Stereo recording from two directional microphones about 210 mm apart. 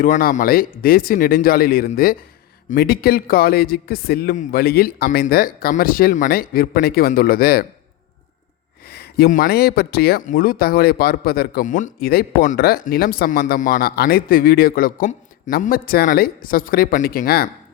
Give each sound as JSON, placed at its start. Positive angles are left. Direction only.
{"t": 0.0, "sound": "speech", "side_deg": 40}
{"t": 8.9, "sound": "speech", "side_deg": 50}